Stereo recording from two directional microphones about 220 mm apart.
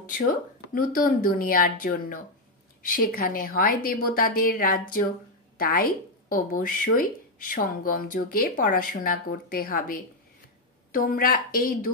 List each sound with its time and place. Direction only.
0.2 s speech: 40° left (ahead or behind)